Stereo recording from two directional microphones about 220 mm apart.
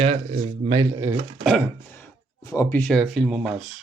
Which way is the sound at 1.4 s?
5° left (ahead or behind).